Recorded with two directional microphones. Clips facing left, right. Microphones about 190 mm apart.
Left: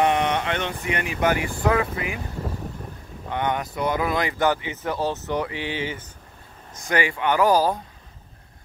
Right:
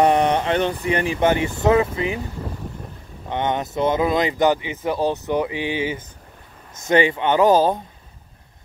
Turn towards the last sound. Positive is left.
turn(degrees=-20)  # may be behind; listen again after turning